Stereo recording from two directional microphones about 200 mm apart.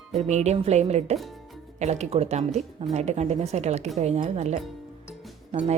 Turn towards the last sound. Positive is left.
turn(degrees=-35)  # may be behind; listen again after turning